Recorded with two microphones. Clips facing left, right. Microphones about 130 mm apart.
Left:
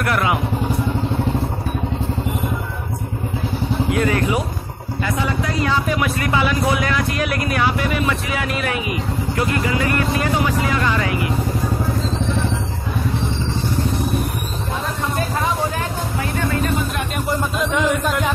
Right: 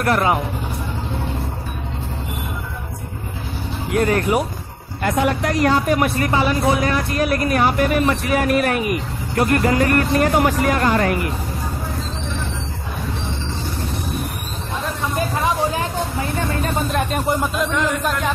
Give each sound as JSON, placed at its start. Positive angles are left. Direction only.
{"t": 0.0, "sound": "speech", "side_deg": -40}
{"t": 3.9, "sound": "speech", "side_deg": -45}
{"t": 5.0, "sound": "speech", "side_deg": -65}
{"t": 5.7, "sound": "speech", "side_deg": -45}
{"t": 17.6, "sound": "speech", "side_deg": 0}